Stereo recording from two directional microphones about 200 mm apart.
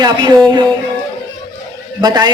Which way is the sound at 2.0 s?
20° right (ahead or behind).